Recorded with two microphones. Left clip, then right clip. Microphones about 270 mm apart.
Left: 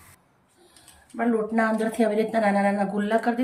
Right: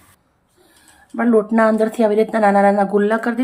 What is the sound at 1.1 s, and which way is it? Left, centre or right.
Speech, centre.